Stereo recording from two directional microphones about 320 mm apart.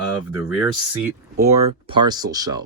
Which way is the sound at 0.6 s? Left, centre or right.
Centre.